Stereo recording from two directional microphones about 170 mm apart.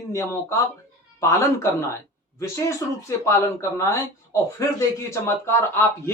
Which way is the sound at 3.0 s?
15° left (ahead or behind).